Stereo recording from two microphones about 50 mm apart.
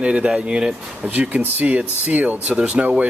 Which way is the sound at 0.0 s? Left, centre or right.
Right.